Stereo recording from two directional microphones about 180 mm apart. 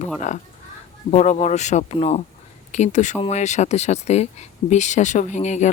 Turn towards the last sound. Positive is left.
turn(degrees=40)  # may be behind; listen again after turning